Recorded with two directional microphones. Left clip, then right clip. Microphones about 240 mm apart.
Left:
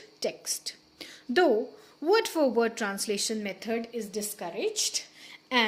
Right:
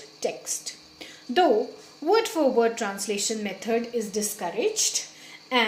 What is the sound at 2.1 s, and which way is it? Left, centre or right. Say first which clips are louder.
A woman's voice: right 3 dB; left.